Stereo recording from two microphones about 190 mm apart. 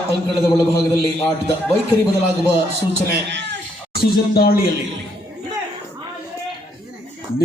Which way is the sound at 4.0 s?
55° left (ahead or behind).